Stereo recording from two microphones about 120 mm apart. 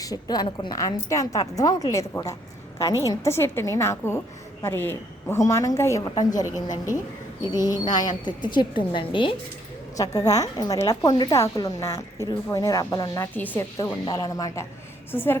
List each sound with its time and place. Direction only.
0.0 s a woman's voice: 30° left (ahead or behind)
6.1 s a woman's voice: 35° left (ahead or behind)
10.0 s a woman's voice: 30° left (ahead or behind)
13.3 s speech: 15° left (ahead or behind)
14.0 s a woman's voice: 30° left (ahead or behind)